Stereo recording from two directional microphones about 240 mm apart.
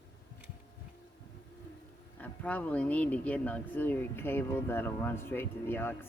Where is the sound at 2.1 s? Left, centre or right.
Centre.